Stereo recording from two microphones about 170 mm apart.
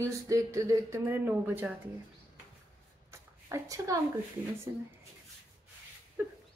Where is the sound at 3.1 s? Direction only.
15° right (ahead or behind).